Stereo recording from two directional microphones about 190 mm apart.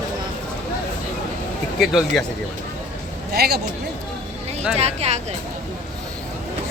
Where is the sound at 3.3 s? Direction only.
55° right (ahead or behind).